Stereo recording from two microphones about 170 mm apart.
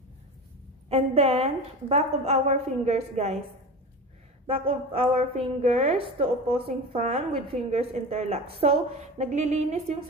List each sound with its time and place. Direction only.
0.8 s a woman's voice: 40° right (ahead or behind)
4.5 s a woman's voice: 35° right (ahead or behind)